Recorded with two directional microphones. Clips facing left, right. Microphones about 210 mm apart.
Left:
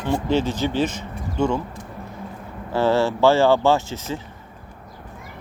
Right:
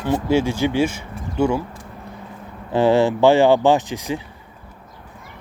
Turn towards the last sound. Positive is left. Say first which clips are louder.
# right 3 dB
turn(degrees=-15)  # may be behind; listen again after turning